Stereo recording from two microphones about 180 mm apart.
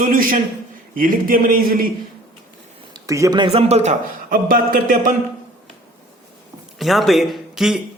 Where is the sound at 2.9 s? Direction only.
20° right (ahead or behind); by 3.9 s 35° right (ahead or behind).